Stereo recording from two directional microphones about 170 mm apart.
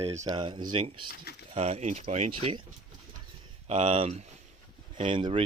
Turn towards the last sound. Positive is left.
turn(degrees=-35)  # may be behind; listen again after turning